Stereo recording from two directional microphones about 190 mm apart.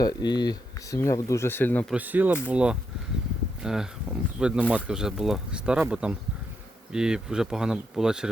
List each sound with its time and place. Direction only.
0.0 s speech: 20° left (ahead or behind)
1.9 s speech: 10° right (ahead or behind)